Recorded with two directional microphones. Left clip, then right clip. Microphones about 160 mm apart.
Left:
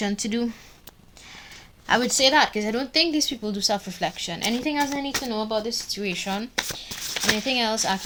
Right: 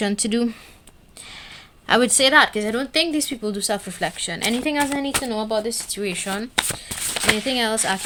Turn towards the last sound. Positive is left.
turn(degrees=-35)  # may be behind; listen again after turning